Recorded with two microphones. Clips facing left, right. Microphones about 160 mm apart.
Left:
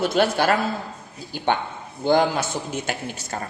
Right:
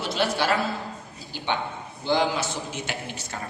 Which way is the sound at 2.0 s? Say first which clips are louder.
Left 5 dB; 50° left (ahead or behind).